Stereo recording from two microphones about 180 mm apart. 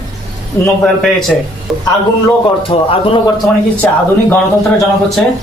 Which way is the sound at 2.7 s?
30° left (ahead or behind).